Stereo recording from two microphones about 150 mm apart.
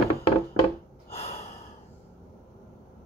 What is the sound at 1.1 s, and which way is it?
Gasp, 40° left (ahead or behind).